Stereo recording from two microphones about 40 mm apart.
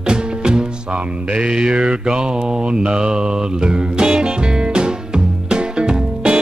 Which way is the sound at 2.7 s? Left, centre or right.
Right.